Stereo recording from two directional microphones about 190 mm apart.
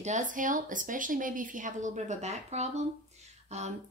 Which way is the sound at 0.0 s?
40° right (ahead or behind).